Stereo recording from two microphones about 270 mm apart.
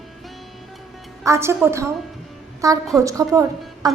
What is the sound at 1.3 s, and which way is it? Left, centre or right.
A woman's voice, centre.